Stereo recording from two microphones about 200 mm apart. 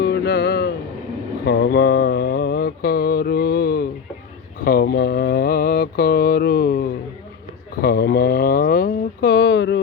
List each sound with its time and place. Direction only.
0.0 s music: 55° left (ahead or behind)
1.5 s mantra: 55° left (ahead or behind)
7.8 s a sound: 55° left (ahead or behind)